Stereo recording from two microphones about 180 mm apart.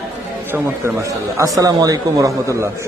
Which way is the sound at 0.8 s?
15° right (ahead or behind).